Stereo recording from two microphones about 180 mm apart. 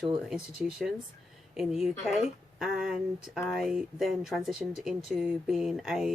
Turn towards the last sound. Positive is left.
turn(degrees=0)  # may be behind; listen again after turning